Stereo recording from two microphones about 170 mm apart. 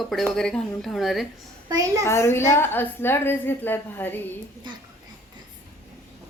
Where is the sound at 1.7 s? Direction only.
20° right (ahead or behind).